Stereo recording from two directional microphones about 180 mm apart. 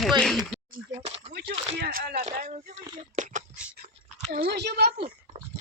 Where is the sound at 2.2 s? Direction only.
40° right (ahead or behind).